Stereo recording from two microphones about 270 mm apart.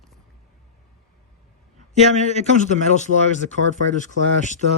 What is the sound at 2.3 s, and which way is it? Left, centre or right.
Speech, left.